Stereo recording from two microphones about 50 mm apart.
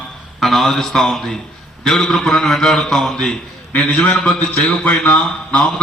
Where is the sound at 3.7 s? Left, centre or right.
Left.